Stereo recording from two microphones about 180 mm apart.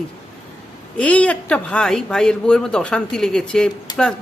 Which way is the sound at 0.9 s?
5° left (ahead or behind).